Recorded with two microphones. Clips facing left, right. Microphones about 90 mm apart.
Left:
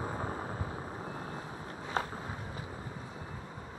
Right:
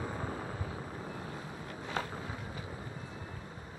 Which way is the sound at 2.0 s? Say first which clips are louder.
Left 3 dB; 35° left (ahead or behind).